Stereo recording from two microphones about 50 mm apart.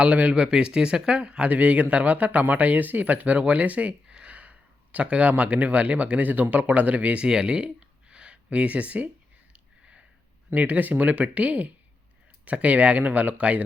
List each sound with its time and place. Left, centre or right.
0.0 s speech: right
0.4 s speech: centre
7.3 s speech: centre
9.5 s a sound: right
10.5 s speech: right